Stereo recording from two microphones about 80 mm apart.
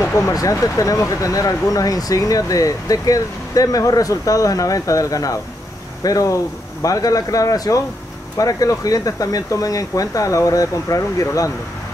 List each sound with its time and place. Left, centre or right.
0.0 s speech: left